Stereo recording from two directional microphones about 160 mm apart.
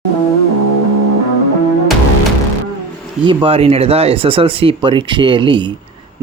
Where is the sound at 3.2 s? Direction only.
30° right (ahead or behind).